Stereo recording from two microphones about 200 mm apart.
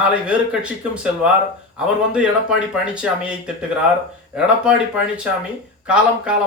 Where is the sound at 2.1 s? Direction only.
5° right (ahead or behind).